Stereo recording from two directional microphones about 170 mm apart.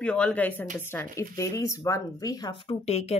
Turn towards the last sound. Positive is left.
turn(degrees=40)  # may be behind; listen again after turning